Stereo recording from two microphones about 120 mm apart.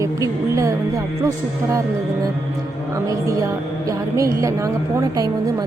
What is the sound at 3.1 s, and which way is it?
A woman's voice, 25° right (ahead or behind).